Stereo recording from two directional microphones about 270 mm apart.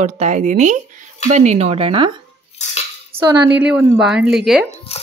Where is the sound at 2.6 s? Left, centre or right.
Left.